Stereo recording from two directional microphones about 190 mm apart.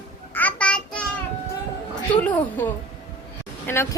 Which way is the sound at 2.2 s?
10° left (ahead or behind).